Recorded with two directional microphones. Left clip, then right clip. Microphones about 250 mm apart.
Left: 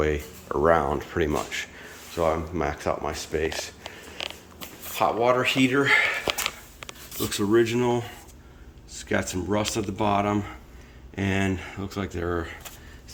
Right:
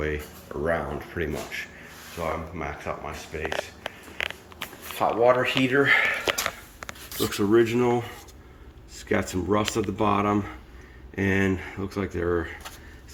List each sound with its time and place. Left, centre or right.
0.0 s speech: centre
2.1 s speech: left
4.9 s speech: centre
7.2 s speech: centre
9.0 s speech: centre